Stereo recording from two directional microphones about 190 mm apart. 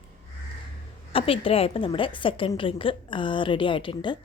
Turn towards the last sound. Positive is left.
turn(degrees=25)  # may be behind; listen again after turning